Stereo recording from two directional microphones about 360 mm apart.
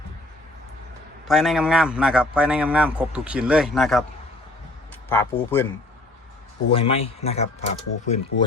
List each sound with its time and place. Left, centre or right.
1.3 s a man's voice: centre
5.0 s speech: centre
6.7 s speech: centre